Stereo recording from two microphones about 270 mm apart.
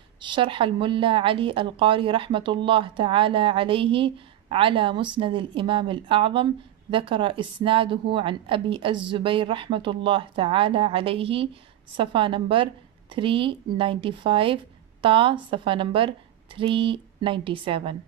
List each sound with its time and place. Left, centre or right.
0.2 s a woman's voice: centre